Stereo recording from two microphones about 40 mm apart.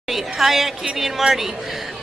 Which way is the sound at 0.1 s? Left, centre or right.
Centre.